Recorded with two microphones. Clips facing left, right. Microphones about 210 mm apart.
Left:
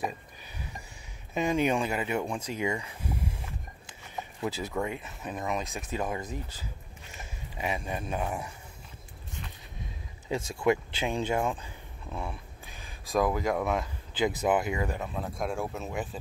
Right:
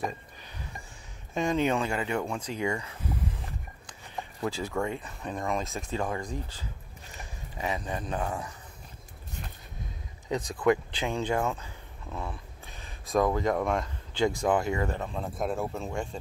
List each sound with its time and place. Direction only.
1.3 s speech: 10° left (ahead or behind)
4.4 s speech: 20° left (ahead or behind)
5.2 s speech: 5° left (ahead or behind)
6.0 s speech: 20° left (ahead or behind)
7.2 s a sound: 20° left (ahead or behind)
8.1 s speech: 10° left (ahead or behind)
10.3 s speech: 25° left (ahead or behind)
11.0 s speech: 15° left (ahead or behind)
15.0 s speech: centre (ahead or behind)